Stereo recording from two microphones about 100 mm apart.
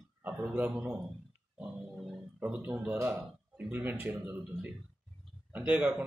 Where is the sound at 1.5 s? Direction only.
5° right (ahead or behind).